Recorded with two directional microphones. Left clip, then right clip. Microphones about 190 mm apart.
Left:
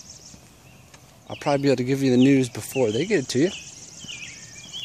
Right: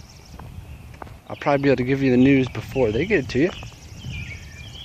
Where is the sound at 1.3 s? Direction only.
20° left (ahead or behind).